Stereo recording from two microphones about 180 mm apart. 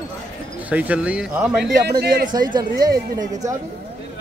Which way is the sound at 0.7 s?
10° right (ahead or behind).